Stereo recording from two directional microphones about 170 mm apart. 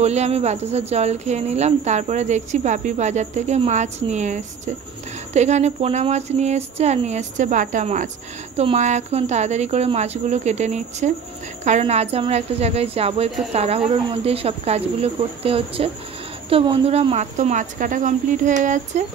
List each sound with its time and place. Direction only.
0.0 s speech: 40° right (ahead or behind)